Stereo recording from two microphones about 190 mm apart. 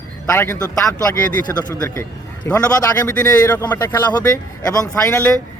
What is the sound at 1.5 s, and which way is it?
Speech, 10° left (ahead or behind).